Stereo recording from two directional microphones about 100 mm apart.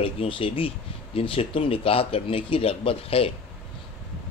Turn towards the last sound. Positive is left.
turn(degrees=70)  # may be behind; listen again after turning